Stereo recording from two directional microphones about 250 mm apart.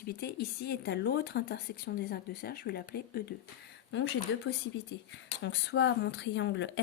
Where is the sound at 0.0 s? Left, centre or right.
Left.